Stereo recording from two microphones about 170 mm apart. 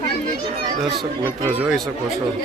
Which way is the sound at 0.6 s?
25° right (ahead or behind).